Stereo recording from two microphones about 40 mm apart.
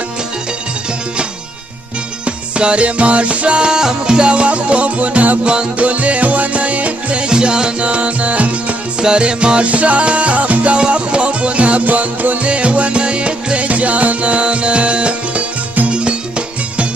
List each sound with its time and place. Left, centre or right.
2.2 s music: right
5.4 s music: right
5.8 s music: right
7.9 s music: right
9.0 s music: right
12.4 s music: right